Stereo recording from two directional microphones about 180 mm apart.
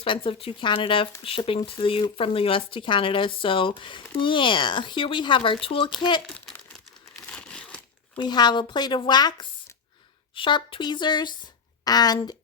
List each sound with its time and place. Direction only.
0.0 s speech: 30° left (ahead or behind)
7.3 s crumpling: 5° left (ahead or behind)
8.1 s speech: 25° left (ahead or behind)